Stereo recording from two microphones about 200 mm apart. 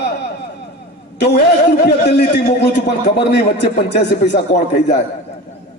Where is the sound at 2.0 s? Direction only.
60° left (ahead or behind).